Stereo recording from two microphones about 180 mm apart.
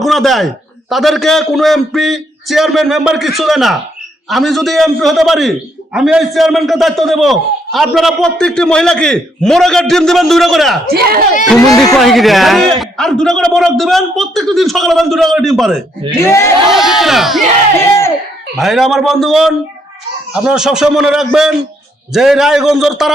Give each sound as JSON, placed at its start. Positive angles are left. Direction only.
{"t": 0.0, "sound": "a man's voice", "side_deg": 0}
{"t": 10.9, "sound": "speech", "side_deg": -55}
{"t": 11.9, "sound": "a man's voice", "side_deg": 0}
{"t": 16.1, "sound": "speech", "side_deg": 15}
{"t": 16.6, "sound": "a man's voice", "side_deg": 0}
{"t": 18.5, "sound": "a man's voice", "side_deg": 0}